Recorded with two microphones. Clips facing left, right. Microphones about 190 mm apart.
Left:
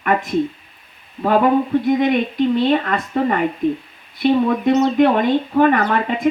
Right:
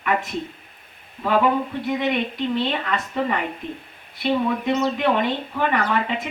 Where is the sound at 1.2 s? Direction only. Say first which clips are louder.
Left 5 dB; 45° left (ahead or behind).